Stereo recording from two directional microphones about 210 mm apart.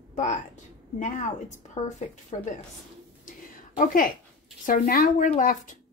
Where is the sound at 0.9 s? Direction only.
35° left (ahead or behind).